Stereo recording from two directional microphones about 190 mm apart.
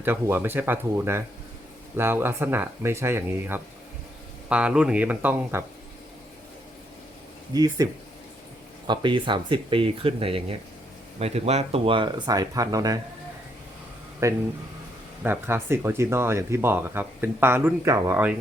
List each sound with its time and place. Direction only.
0.0 s speech: 10° right (ahead or behind)
7.5 s speech: 20° right (ahead or behind)
8.9 s speech: 25° right (ahead or behind)
14.2 s speech: 15° right (ahead or behind)